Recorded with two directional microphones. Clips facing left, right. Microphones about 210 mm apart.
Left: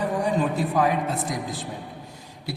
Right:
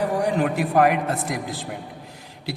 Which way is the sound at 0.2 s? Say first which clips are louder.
Right 2 dB; 75° right (ahead or behind).